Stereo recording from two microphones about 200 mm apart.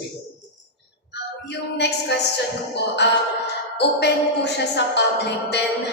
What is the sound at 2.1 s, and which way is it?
A man's voice, 55° left (ahead or behind).